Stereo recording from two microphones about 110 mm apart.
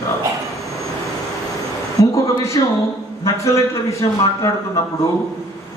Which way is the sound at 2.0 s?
30° left (ahead or behind).